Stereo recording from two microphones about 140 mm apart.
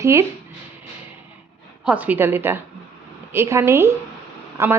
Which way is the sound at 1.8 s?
10° right (ahead or behind).